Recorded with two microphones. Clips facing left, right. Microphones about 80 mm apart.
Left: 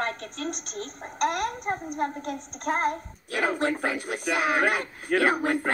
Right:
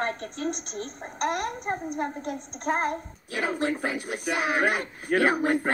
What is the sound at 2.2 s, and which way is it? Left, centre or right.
Speech, right.